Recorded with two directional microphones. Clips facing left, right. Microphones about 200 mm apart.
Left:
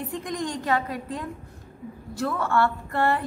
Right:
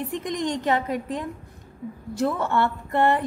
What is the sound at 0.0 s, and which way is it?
A woman's voice, 20° right (ahead or behind).